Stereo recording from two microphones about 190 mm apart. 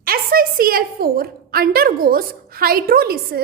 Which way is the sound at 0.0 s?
50° right (ahead or behind).